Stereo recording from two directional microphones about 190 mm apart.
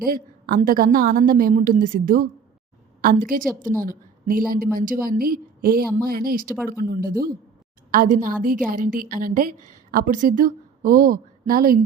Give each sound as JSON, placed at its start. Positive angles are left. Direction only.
{"t": 0.0, "sound": "a woman's voice", "side_deg": -50}